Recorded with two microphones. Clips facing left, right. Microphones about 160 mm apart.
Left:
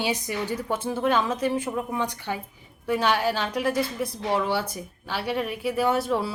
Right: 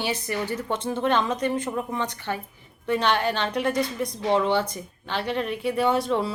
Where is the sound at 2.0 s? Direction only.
10° left (ahead or behind).